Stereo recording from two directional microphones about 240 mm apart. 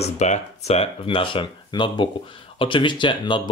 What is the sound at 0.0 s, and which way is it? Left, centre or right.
Speech, left.